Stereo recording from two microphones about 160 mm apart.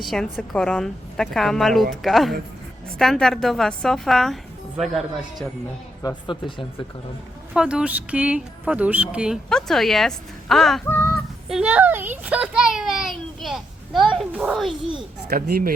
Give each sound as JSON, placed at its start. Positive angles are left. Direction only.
{"t": 0.0, "sound": "speech", "side_deg": 0}
{"t": 6.0, "sound": "speech", "side_deg": 20}
{"t": 7.5, "sound": "speech", "side_deg": -5}
{"t": 10.8, "sound": "speech", "side_deg": 15}
{"t": 11.4, "sound": "a child's voice", "side_deg": -5}
{"t": 15.3, "sound": "speech", "side_deg": -75}